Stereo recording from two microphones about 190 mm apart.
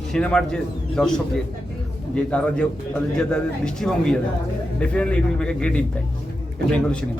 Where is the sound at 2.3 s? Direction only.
5° left (ahead or behind).